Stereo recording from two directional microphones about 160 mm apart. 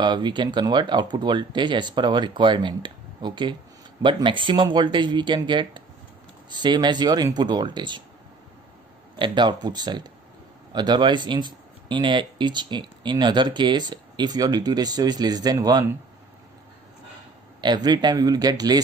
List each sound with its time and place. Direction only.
0.0 s speech: 30° right (ahead or behind)
9.2 s speech: 30° right (ahead or behind)
17.6 s speech: 25° right (ahead or behind)